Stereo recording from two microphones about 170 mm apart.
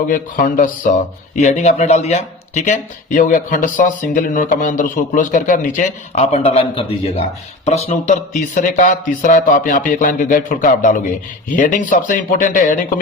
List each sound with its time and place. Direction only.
0.1 s speech: 55° left (ahead or behind)